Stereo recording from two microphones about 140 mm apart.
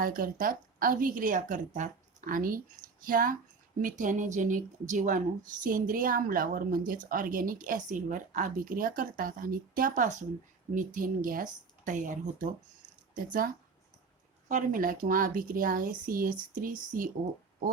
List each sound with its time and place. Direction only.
0.0 s speech: 85° right
3.8 s speech: 70° right (ahead or behind)
14.4 s speech: 70° right (ahead or behind)
16.6 s speech: 70° right (ahead or behind)